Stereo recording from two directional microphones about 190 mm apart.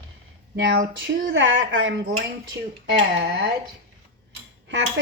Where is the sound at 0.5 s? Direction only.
65° right (ahead or behind); by 2.0 s 85° right.